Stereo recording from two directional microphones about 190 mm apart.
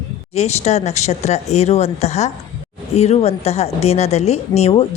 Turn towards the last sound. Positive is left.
turn(degrees=30)  # may be behind; listen again after turning